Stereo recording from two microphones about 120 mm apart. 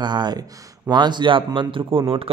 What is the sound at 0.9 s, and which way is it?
Mantra, 40° right (ahead or behind).